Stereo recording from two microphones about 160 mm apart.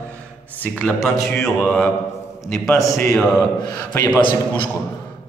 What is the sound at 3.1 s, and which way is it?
Speech, 5° left (ahead or behind).